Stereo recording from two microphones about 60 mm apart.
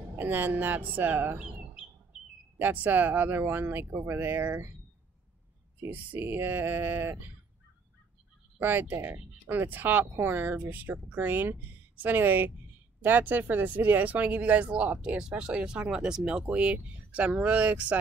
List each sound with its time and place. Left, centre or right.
0.2 s speech: right
2.6 s speech: right
5.9 s speech: right
6.2 s speech: right
8.5 s speech: right; by 16.5 s centre
16.5 s speech: right